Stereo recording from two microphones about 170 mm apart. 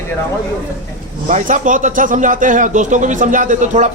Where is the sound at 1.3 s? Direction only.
50° right (ahead or behind).